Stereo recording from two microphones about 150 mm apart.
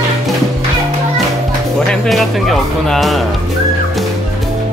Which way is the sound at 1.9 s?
Centre (ahead or behind).